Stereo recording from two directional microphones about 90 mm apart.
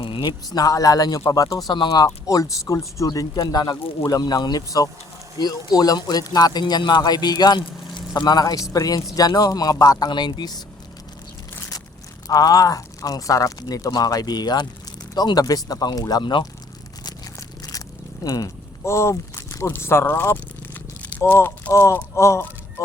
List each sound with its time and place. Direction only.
0.0 s speech: 65° left (ahead or behind)
2.0 s speech: 35° left (ahead or behind)
12.3 s speech: 45° left (ahead or behind)
17.6 s biting: 45° left (ahead or behind)
19.6 s speech: 25° left (ahead or behind)